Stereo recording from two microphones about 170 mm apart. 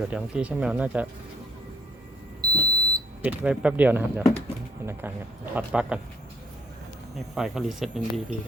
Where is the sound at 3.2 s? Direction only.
10° right (ahead or behind).